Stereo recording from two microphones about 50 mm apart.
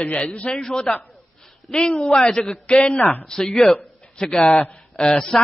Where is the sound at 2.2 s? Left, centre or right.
Centre.